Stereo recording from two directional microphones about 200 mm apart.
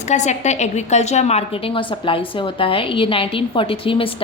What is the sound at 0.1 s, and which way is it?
A woman's voice, 35° left (ahead or behind).